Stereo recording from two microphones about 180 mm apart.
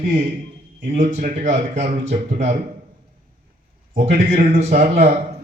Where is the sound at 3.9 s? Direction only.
45° right (ahead or behind).